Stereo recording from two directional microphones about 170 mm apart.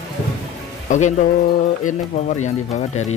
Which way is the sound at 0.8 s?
45° left (ahead or behind).